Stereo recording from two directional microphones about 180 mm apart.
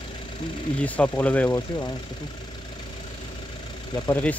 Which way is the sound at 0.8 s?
10° left (ahead or behind).